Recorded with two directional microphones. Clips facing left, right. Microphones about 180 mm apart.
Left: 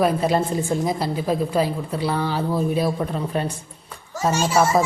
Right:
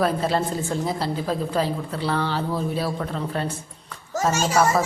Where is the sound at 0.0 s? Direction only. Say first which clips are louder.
Left 3 dB; 15° left (ahead or behind).